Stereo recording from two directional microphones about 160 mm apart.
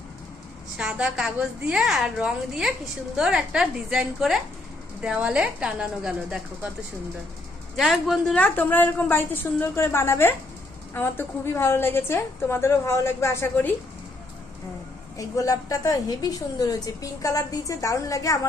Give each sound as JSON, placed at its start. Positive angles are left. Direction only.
{"t": 0.8, "sound": "a woman's voice", "side_deg": -5}
{"t": 7.8, "sound": "a woman's voice", "side_deg": 0}
{"t": 8.4, "sound": "a woman's voice", "side_deg": 10}
{"t": 15.2, "sound": "a woman's voice", "side_deg": 20}